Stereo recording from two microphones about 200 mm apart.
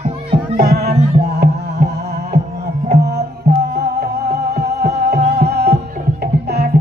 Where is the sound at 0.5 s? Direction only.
50° right (ahead or behind).